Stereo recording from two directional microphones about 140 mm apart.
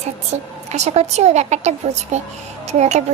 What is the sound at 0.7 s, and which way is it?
Child singing, 55° right (ahead or behind).